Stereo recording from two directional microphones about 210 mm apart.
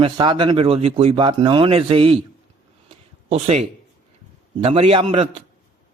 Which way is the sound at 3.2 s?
30° right (ahead or behind).